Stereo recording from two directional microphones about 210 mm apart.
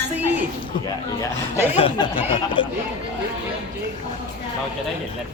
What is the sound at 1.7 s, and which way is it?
Speech, 25° left (ahead or behind).